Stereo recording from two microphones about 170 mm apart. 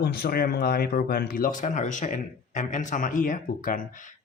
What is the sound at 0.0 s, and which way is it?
Speech, 65° left (ahead or behind).